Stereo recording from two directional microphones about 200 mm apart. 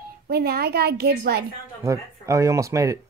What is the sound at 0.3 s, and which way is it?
A child's voice, 50° right (ahead or behind).